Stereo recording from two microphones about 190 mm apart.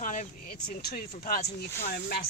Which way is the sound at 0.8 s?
55° left (ahead or behind).